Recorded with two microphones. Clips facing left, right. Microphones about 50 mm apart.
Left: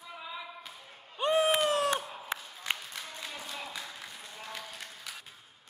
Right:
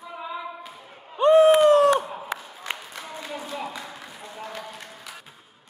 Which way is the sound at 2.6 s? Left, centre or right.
Centre.